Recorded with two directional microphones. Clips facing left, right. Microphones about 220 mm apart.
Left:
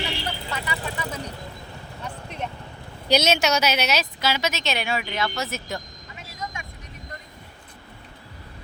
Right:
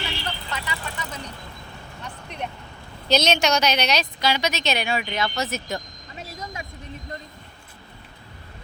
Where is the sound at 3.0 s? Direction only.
10° left (ahead or behind).